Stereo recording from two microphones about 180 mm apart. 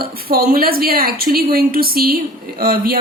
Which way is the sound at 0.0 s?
55° right (ahead or behind).